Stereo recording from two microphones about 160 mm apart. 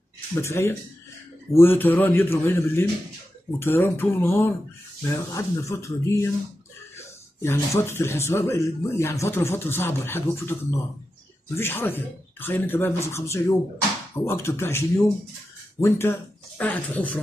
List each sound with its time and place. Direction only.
0.4 s speech: 15° left (ahead or behind)
7.4 s speech: 15° left (ahead or behind)